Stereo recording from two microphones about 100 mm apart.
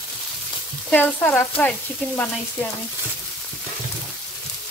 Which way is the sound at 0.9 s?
15° left (ahead or behind).